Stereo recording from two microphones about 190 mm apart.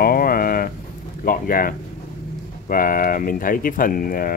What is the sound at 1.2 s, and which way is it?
Speech, 50° left (ahead or behind).